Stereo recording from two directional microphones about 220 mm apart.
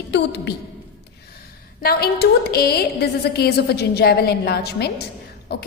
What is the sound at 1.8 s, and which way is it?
A woman's voice, 45° left (ahead or behind).